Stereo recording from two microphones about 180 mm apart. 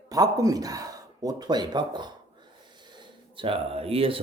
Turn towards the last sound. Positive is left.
turn(degrees=-30)  # may be behind; listen again after turning